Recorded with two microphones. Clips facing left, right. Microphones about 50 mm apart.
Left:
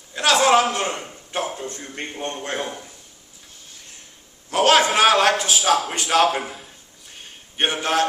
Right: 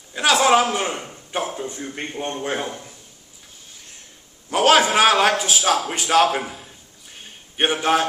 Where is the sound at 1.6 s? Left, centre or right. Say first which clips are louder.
Right 2 dB; centre.